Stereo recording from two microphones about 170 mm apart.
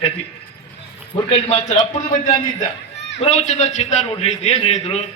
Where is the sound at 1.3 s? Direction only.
40° left (ahead or behind).